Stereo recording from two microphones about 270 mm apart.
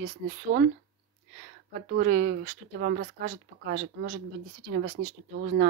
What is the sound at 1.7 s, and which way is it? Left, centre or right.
Speech, right.